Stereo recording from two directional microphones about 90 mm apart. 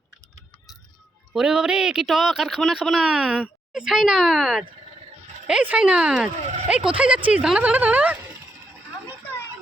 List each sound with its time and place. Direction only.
1.3 s speech: 5° right (ahead or behind)